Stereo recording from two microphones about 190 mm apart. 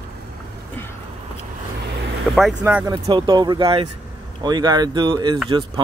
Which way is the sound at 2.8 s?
25° right (ahead or behind).